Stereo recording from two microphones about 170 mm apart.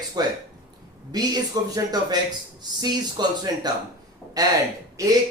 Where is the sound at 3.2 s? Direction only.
25° right (ahead or behind).